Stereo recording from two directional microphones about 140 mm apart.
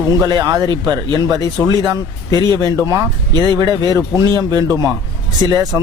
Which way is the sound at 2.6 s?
25° right (ahead or behind).